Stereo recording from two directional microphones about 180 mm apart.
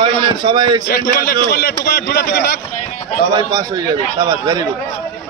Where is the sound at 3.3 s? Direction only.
20° right (ahead or behind).